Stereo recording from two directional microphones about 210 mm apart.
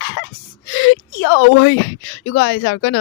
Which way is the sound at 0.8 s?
55° left (ahead or behind).